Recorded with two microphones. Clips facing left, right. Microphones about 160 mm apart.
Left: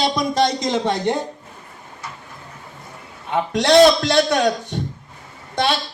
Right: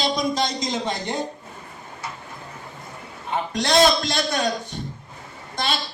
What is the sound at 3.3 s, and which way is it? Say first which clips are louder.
A man's voice: left 6 dB; 75° left (ahead or behind).